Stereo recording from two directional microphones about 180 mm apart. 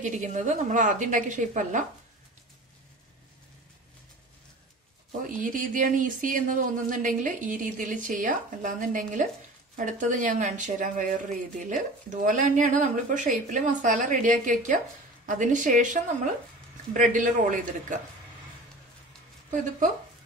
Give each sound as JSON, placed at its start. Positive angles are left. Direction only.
{"t": 0.0, "sound": "speech", "side_deg": -45}
{"t": 5.2, "sound": "speech", "side_deg": -45}